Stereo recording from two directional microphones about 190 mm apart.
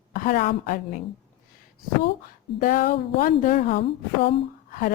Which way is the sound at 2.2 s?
45° left (ahead or behind).